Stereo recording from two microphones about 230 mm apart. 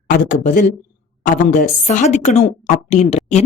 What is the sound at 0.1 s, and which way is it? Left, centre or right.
A woman's voice, left.